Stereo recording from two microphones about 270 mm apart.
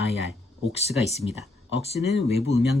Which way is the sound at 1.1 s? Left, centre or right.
Left.